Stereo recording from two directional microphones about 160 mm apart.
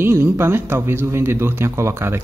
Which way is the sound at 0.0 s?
15° right (ahead or behind).